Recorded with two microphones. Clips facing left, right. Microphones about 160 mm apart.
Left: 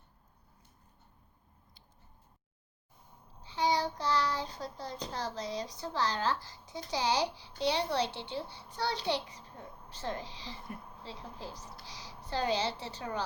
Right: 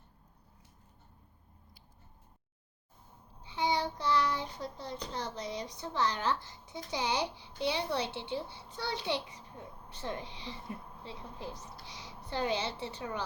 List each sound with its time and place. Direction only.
3.4 s child singing: 20° right (ahead or behind)
5.1 s a woman's voice: 20° right (ahead or behind)